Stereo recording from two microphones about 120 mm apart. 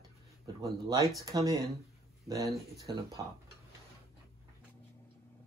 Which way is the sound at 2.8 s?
30° right (ahead or behind).